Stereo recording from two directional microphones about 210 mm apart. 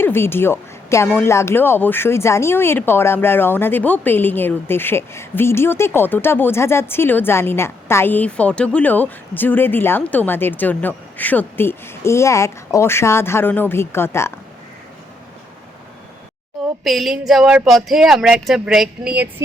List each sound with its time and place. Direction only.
0.0 s speech: 10° left (ahead or behind)
16.8 s speech: centre (ahead or behind)